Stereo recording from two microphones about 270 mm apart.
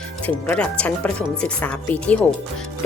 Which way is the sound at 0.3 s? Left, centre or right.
Centre.